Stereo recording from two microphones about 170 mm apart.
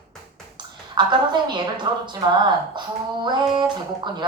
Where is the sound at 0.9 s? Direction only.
25° right (ahead or behind).